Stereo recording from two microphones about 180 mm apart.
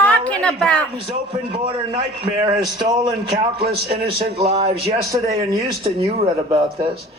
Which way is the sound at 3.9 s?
30° right (ahead or behind).